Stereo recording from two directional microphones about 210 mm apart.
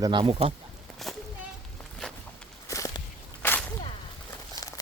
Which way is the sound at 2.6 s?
15° left (ahead or behind).